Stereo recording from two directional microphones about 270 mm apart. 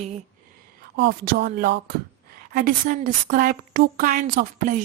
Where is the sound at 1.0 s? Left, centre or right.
Right.